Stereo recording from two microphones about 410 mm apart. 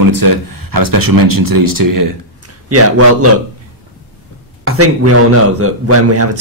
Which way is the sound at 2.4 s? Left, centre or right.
Right.